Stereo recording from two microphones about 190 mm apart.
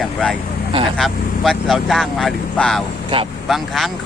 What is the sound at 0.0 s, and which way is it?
Speech, 5° left (ahead or behind).